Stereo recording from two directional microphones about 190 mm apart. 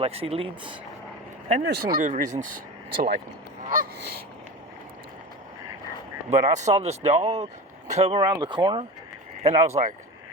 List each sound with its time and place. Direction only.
0.0 s speech: 30° right (ahead or behind)
1.6 s speech: 60° right (ahead or behind)
2.0 s speech: 40° right (ahead or behind)
6.3 s speech: 35° right (ahead or behind)